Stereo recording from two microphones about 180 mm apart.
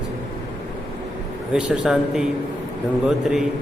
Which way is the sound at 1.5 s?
5° right (ahead or behind).